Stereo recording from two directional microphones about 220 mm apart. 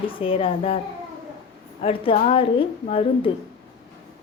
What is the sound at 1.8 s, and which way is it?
A woman's voice, 25° left (ahead or behind).